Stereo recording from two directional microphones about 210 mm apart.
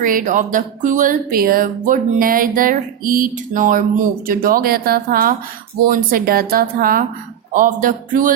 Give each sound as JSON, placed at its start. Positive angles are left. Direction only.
{"t": 0.0, "sound": "speech", "side_deg": -40}